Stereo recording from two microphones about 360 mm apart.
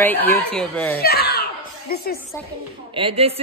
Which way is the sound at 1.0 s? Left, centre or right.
Left.